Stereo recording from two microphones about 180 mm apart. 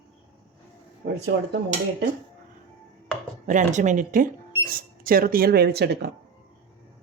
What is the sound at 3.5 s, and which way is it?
Speech, 45° right (ahead or behind).